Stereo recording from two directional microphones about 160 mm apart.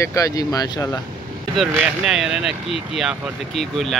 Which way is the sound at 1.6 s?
5° right (ahead or behind).